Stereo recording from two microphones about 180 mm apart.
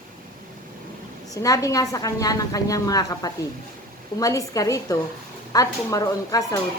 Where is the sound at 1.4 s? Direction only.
20° left (ahead or behind).